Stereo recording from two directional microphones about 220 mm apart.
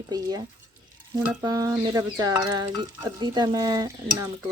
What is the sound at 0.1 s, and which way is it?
Speech, 15° right (ahead or behind).